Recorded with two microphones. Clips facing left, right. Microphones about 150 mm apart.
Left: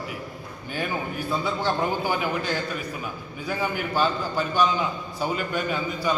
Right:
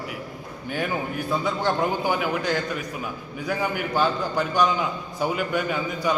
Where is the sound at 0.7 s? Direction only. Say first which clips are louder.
Right 2 dB; 20° right (ahead or behind).